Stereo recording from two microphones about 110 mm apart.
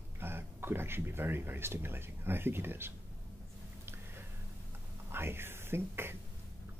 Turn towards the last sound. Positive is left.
turn(degrees=-20)  # may be behind; listen again after turning